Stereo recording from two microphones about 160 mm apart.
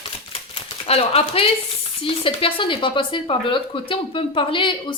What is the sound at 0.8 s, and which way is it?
Speech, 40° left (ahead or behind).